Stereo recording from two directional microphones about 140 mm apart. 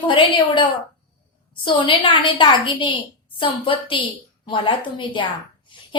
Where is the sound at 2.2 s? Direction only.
35° left (ahead or behind).